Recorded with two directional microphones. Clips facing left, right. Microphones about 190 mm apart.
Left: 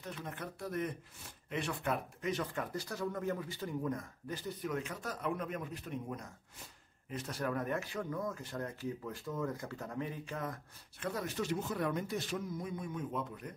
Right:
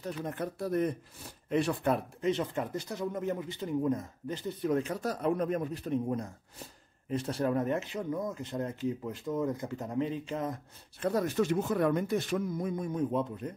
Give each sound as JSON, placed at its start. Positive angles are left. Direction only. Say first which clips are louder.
{"t": 0.0, "sound": "speech", "louder": "right 8 dB", "side_deg": -40}
{"t": 11.0, "sound": "speech", "louder": "right 9 dB", "side_deg": -40}